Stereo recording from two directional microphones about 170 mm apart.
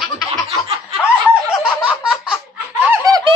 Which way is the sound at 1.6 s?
5° right (ahead or behind).